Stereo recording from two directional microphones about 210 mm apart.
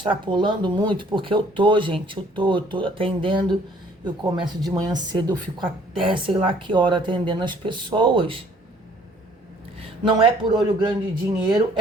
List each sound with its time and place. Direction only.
0.0 s speech: 20° right (ahead or behind)
10.0 s speech: 20° right (ahead or behind)